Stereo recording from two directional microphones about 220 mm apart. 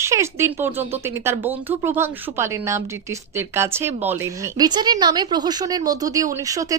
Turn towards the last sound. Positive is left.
turn(degrees=-15)  # may be behind; listen again after turning